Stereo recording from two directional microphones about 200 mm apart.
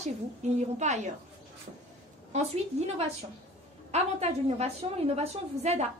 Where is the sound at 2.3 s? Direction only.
30° right (ahead or behind).